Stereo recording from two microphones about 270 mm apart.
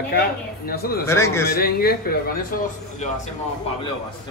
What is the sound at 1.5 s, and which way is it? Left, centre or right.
A man's voice, left.